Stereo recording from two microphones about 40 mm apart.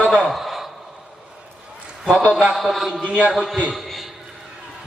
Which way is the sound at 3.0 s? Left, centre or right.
Right.